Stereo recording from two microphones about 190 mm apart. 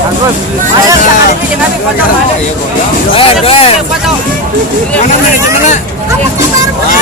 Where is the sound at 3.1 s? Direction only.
30° left (ahead or behind).